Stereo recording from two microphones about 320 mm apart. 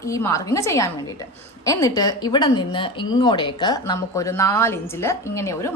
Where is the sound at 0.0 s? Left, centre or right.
Centre.